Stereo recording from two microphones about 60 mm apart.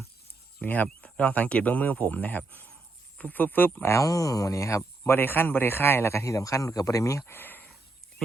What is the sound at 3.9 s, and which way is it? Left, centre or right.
Speech, left.